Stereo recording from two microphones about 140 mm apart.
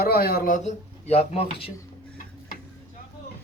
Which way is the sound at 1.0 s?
45° left (ahead or behind).